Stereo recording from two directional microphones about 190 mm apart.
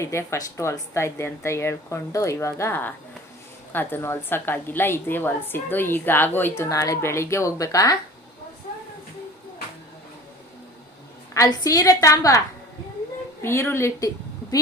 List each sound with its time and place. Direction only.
0.0 s a woman's voice: 15° left (ahead or behind)
11.3 s a woman's voice: 20° left (ahead or behind)
13.4 s a woman's voice: 15° left (ahead or behind)